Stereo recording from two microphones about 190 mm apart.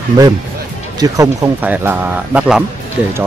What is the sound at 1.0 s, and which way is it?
Speech, 15° right (ahead or behind).